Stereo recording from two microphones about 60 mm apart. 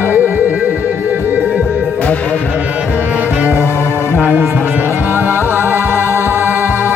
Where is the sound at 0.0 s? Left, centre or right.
Right.